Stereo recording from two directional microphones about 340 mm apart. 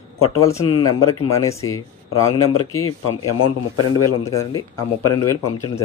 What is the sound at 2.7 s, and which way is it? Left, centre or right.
Speech, left.